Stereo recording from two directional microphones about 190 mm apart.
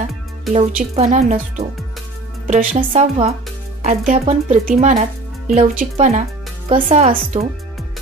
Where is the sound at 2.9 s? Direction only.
30° right (ahead or behind).